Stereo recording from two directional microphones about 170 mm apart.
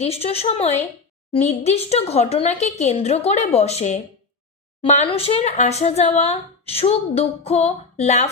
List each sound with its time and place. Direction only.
0.0 s a woman's voice: 35° left (ahead or behind)
5.0 s a woman's voice: 35° left (ahead or behind)